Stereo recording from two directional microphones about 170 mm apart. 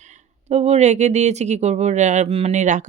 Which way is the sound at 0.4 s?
40° right (ahead or behind).